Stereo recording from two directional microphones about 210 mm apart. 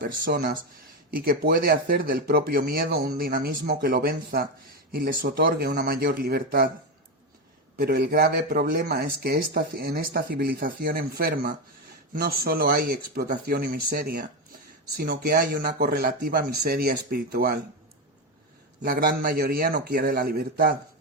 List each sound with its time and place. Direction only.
0.0 s speech: 45° right (ahead or behind)
7.8 s speech: 50° right (ahead or behind)
18.8 s speech: 45° right (ahead or behind)